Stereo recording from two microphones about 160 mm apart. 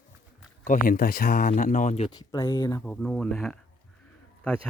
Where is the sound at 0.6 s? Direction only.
60° left (ahead or behind).